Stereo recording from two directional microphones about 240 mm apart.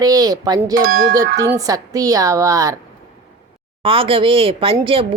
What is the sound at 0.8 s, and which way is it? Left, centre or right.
Speech, right.